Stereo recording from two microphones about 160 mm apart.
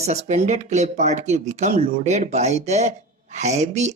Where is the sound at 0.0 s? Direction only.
45° right (ahead or behind).